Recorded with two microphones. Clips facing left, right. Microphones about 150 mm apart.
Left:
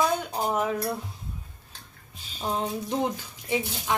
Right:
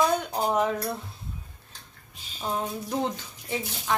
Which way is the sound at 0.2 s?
Centre (ahead or behind).